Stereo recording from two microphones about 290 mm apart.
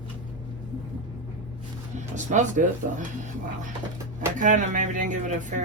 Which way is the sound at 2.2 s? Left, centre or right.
Right.